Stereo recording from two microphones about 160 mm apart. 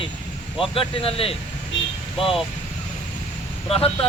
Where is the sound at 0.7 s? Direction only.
35° left (ahead or behind).